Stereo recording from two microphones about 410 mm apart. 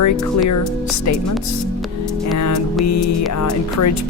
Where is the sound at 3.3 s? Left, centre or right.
Left.